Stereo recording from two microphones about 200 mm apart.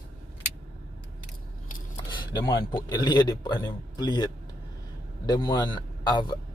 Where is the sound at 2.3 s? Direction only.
20° left (ahead or behind).